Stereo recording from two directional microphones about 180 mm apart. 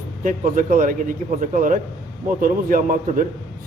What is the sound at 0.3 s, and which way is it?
A man's voice, 50° right (ahead or behind).